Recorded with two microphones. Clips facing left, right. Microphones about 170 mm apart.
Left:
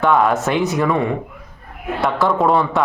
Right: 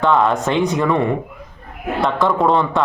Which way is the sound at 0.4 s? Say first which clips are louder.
Right 1 dB; 5° left (ahead or behind).